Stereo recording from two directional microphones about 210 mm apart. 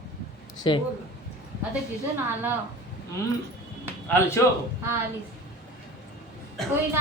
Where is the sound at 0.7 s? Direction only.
25° left (ahead or behind).